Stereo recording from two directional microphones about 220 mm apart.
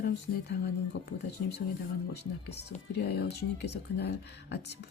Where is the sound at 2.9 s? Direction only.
45° left (ahead or behind).